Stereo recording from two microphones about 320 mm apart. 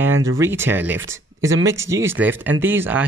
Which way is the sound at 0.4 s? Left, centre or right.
Centre.